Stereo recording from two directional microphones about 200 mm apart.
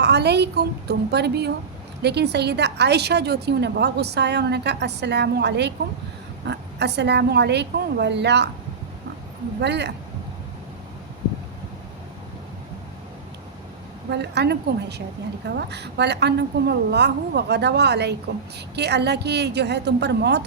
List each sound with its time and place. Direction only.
0.0 s a woman's voice: 55° right (ahead or behind)
9.6 s a woman's voice: 60° right (ahead or behind)
14.1 s a woman's voice: 55° right (ahead or behind)